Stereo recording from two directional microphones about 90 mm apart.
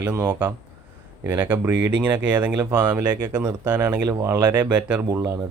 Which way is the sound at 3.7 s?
50° right (ahead or behind).